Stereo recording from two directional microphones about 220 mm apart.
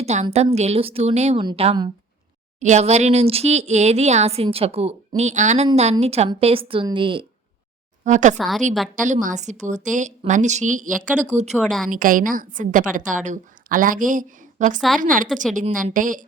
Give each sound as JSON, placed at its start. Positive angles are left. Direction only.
{"t": 0.0, "sound": "a woman's voice", "side_deg": -30}
{"t": 8.0, "sound": "a woman's voice", "side_deg": -35}
{"t": 8.4, "sound": "a woman's voice", "side_deg": 0}
{"t": 9.2, "sound": "a woman's voice", "side_deg": -35}
{"t": 11.5, "sound": "a woman's voice", "side_deg": 0}
{"t": 11.9, "sound": "a woman's voice", "side_deg": -40}